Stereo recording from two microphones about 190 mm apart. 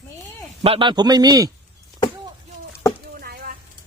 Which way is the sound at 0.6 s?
30° right (ahead or behind).